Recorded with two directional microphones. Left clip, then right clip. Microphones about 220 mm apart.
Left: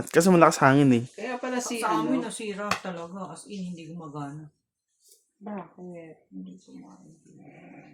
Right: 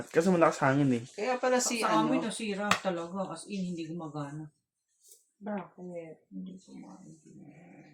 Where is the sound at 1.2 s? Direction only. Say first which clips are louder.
Right 3 dB; 40° right (ahead or behind).